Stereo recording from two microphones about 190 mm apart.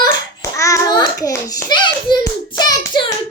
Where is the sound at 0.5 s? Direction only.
15° left (ahead or behind).